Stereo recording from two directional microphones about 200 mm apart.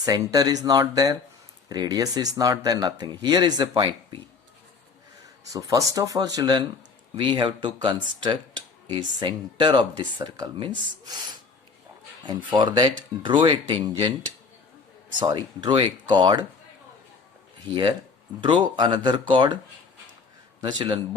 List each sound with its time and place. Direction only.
0.0 s speech: 20° right (ahead or behind)
5.5 s speech: 15° right (ahead or behind)
12.5 s speech: 25° right (ahead or behind)
15.2 s speech: 25° right (ahead or behind)
18.3 s speech: 25° right (ahead or behind)
20.6 s a man's voice: 20° right (ahead or behind)